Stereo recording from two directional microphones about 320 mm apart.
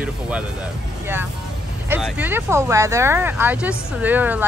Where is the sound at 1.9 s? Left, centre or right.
Centre.